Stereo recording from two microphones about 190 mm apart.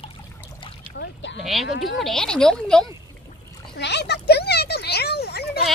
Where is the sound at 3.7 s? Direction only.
65° left (ahead or behind).